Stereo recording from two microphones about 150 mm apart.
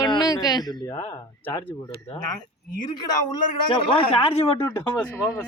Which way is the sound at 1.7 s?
20° left (ahead or behind).